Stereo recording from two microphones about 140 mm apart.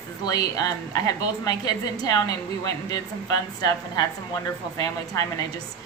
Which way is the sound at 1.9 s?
25° left (ahead or behind).